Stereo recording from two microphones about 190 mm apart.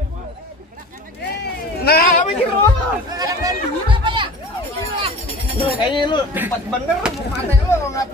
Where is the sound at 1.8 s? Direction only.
55° left (ahead or behind).